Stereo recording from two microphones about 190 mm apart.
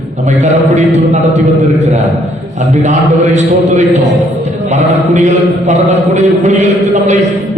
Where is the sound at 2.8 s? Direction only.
40° right (ahead or behind).